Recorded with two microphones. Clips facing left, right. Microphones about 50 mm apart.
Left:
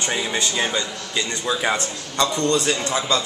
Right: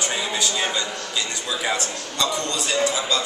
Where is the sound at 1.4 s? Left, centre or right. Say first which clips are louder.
Left 4 dB; left.